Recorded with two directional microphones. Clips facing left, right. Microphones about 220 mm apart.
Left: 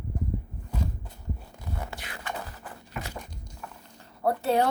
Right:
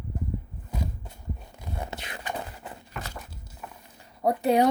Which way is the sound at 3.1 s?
5° right (ahead or behind).